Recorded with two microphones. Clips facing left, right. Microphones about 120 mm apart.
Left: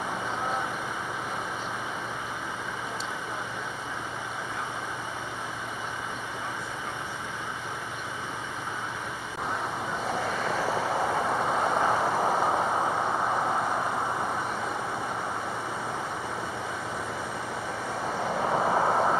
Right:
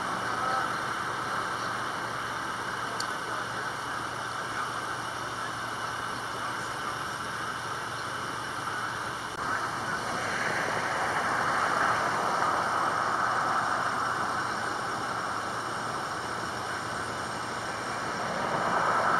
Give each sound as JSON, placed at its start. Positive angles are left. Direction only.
{"t": 10.4, "sound": "vehicle", "side_deg": 30}
{"t": 18.5, "sound": "waves", "side_deg": 30}